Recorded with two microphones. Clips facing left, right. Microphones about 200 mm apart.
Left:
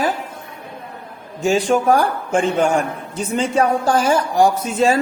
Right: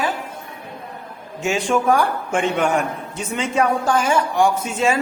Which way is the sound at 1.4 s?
35° left (ahead or behind).